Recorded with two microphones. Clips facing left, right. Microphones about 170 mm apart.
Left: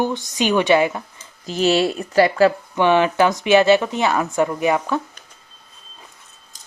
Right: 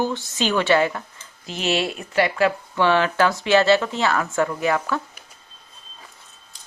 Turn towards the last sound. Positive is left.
turn(degrees=20)  # may be behind; listen again after turning